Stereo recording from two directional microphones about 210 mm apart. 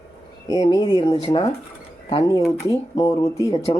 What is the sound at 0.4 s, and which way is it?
Speech, 20° left (ahead or behind).